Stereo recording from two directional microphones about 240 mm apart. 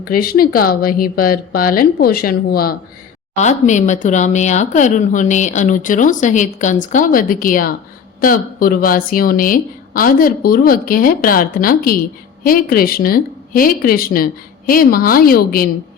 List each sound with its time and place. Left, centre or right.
0.0 s speech: left